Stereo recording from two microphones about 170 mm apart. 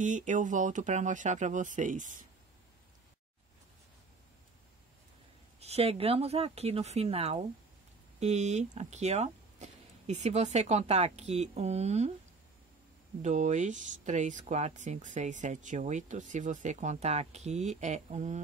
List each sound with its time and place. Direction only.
0.0 s speech: 50° right (ahead or behind)
5.6 s speech: 35° right (ahead or behind)
13.2 s speech: 45° right (ahead or behind)